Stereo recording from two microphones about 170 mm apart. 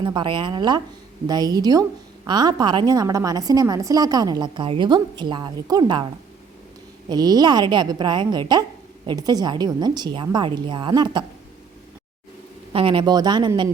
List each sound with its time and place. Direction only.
0.0 s a woman's voice: 25° right (ahead or behind)
7.1 s a woman's voice: 25° right (ahead or behind)
12.7 s a woman's voice: 30° right (ahead or behind)